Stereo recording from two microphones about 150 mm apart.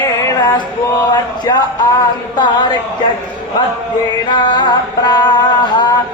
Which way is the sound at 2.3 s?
30° left (ahead or behind).